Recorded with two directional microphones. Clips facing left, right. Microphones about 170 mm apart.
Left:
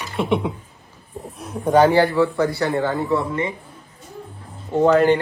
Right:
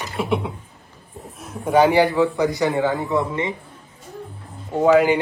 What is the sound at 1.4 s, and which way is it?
Bird, centre (ahead or behind).